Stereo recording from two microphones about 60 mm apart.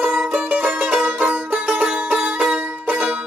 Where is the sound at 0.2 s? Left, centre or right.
Centre.